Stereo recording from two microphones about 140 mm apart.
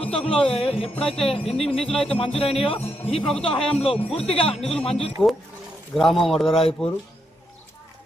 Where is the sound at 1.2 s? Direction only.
45° left (ahead or behind).